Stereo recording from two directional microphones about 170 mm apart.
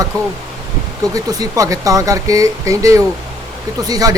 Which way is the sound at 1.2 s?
20° right (ahead or behind).